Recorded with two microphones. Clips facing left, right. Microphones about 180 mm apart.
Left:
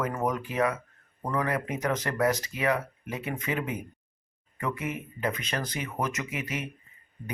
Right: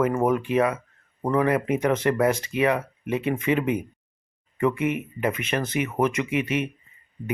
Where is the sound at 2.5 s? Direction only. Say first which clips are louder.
Right 8 dB; 90° right.